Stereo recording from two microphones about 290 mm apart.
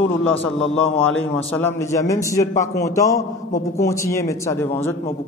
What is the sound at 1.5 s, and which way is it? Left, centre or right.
A man's voice, centre.